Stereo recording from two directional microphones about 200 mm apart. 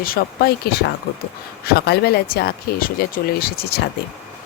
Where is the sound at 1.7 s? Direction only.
50° left (ahead or behind).